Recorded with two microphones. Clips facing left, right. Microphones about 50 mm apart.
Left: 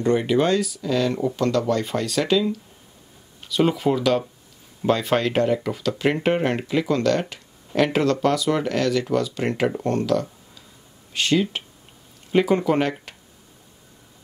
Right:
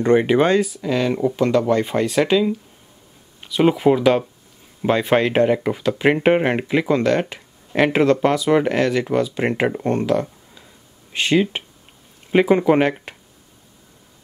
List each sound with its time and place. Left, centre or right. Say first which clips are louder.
0.0 s speech: right 4 dB; right